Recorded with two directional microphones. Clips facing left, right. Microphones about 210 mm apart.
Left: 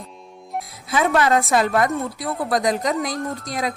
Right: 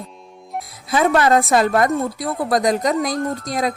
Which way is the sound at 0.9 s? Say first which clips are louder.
Right 3 dB; 40° right (ahead or behind).